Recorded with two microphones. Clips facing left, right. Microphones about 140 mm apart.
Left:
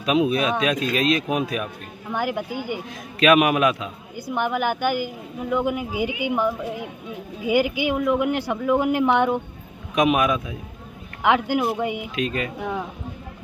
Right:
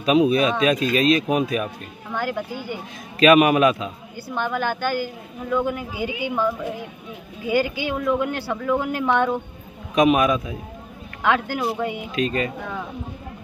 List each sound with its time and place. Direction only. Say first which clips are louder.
0.0 s speech: right 3 dB; centre (ahead or behind)
2.1 s a woman's voice: left 1 dB; 15° left (ahead or behind)
3.2 s speech: right 3 dB; centre (ahead or behind)
4.3 s a woman's voice: left 1 dB; 15° left (ahead or behind)
9.9 s speech: right 2 dB; centre (ahead or behind)
11.2 s a woman's voice: left 2 dB; 15° left (ahead or behind)
12.2 s speech: right 4 dB; centre (ahead or behind)